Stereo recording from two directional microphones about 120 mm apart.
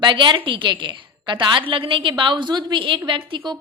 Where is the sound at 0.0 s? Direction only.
40° right (ahead or behind).